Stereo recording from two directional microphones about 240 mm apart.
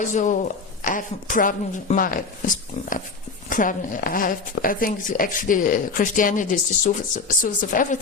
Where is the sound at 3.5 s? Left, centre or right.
Left.